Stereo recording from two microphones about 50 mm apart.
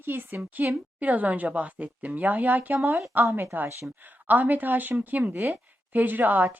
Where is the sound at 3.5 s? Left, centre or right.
Right.